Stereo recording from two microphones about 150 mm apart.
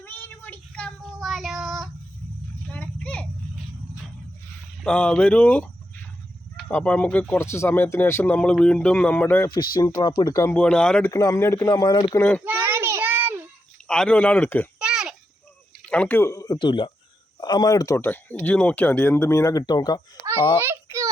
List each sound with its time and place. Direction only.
0.0 s child singing: 15° left (ahead or behind)
2.7 s children playing: 10° left (ahead or behind)
4.8 s speech: 5° left (ahead or behind)
9.8 s speech: 25° left (ahead or behind)
10.5 s speech: 5° left (ahead or behind)
11.1 s speech: 20° left (ahead or behind)
12.5 s child singing: 15° right (ahead or behind)
13.8 s speech: 5° left (ahead or behind)
14.8 s a sound: 5° right (ahead or behind)
15.9 s speech: 10° left (ahead or behind); by 20.0 s 30° left (ahead or behind)
20.6 s a sound: 20° right (ahead or behind)